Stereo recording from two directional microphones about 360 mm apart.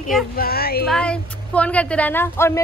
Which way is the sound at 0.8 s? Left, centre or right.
Centre.